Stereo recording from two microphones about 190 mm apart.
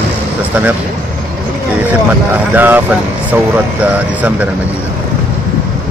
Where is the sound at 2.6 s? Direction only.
10° right (ahead or behind).